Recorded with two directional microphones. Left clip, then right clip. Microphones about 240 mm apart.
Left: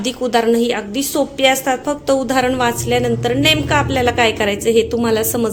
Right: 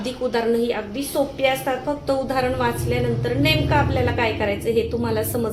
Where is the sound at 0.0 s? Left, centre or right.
Left.